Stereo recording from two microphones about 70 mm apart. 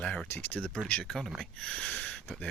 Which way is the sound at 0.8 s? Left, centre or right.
Centre.